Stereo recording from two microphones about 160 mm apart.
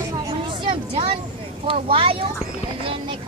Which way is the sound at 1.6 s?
35° right (ahead or behind).